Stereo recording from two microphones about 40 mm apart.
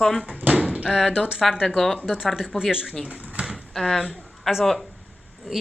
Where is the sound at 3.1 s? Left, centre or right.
Right.